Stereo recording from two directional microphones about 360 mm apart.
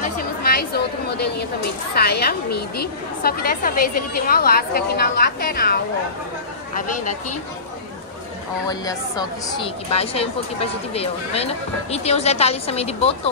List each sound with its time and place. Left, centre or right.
0.0 s chatter: left
2.0 s a woman's voice: left
8.6 s speech: centre